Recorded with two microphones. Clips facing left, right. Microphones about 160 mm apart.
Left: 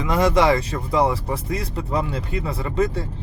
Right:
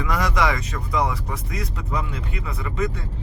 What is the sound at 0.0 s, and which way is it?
Speech, 25° left (ahead or behind).